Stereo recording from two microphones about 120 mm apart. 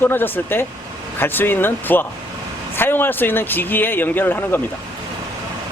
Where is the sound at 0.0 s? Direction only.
15° left (ahead or behind).